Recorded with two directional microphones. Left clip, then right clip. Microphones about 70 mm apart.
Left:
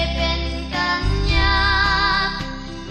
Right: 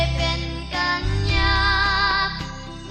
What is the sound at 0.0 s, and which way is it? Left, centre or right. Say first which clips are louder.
Music: left 2 dB; right.